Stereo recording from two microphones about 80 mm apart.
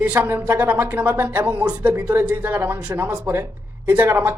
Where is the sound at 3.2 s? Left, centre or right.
Right.